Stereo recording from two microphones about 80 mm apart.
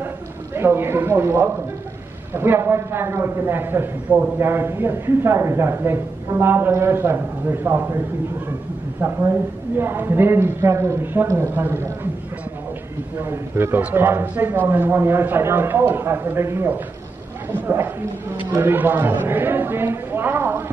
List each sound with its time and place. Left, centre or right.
0.6 s a man's voice: right
9.0 s a man's voice: right
13.2 s a man's voice: right